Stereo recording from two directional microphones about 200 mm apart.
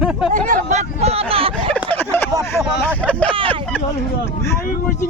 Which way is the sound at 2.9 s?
5° left (ahead or behind).